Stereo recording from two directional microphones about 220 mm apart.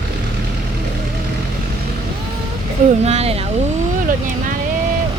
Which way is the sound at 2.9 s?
30° right (ahead or behind).